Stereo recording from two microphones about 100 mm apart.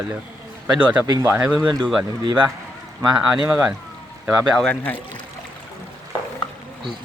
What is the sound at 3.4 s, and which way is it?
Speech, 15° right (ahead or behind).